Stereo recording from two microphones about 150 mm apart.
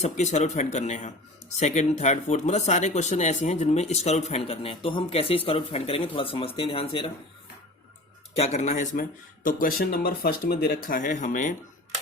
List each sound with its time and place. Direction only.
0.0 s speech: 50° left (ahead or behind)
8.3 s speech: 45° left (ahead or behind)